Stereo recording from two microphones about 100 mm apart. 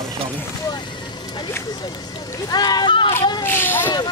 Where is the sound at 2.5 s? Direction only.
40° left (ahead or behind).